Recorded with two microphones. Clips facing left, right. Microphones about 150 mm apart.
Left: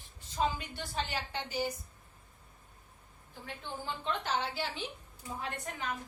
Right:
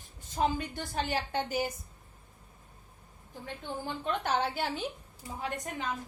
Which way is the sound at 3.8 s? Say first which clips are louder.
Right 3 dB; 50° right (ahead or behind).